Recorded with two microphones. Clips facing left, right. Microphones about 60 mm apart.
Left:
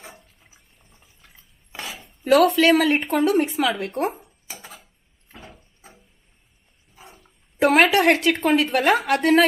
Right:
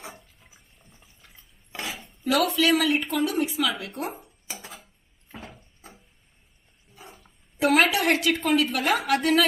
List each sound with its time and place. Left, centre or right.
0.0 s water: centre
1.3 s cutlery: centre
2.2 s speech: left
4.1 s a sound: centre
7.0 s dog: centre
7.6 s a woman's voice: left